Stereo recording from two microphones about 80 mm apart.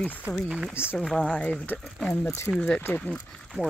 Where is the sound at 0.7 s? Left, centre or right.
Left.